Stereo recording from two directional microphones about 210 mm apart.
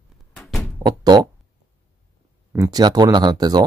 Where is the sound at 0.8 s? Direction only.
20° right (ahead or behind).